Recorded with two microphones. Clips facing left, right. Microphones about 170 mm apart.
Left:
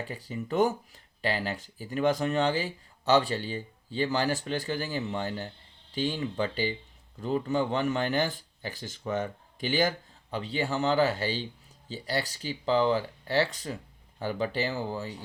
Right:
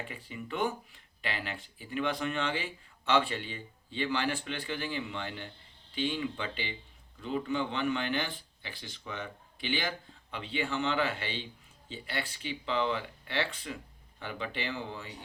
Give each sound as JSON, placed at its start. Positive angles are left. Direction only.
{"t": 0.0, "sound": "speech", "side_deg": 40}